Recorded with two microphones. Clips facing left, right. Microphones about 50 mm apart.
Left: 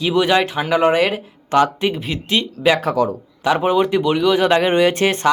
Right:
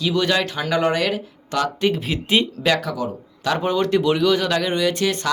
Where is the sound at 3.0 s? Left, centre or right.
Left.